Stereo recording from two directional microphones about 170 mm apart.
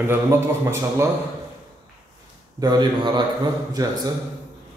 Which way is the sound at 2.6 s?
25° right (ahead or behind).